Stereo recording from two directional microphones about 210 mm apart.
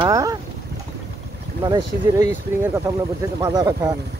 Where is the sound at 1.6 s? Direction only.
20° right (ahead or behind).